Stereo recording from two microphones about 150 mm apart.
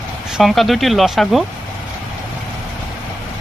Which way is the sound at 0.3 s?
Centre (ahead or behind).